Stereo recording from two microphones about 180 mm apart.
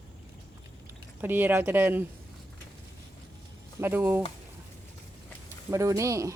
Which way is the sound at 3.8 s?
10° right (ahead or behind).